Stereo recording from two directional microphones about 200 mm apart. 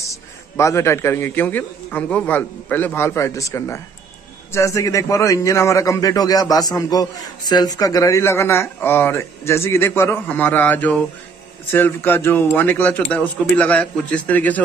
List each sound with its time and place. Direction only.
0.0 s a man's voice: 15° left (ahead or behind)